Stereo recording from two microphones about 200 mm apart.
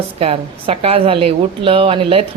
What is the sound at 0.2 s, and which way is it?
Speech, 30° right (ahead or behind).